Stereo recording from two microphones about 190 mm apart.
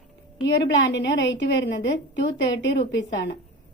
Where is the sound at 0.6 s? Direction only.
70° left (ahead or behind).